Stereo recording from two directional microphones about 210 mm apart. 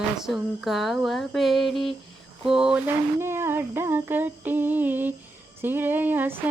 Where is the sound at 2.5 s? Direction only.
5° right (ahead or behind).